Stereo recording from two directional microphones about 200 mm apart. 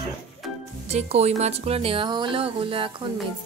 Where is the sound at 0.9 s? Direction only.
30° right (ahead or behind).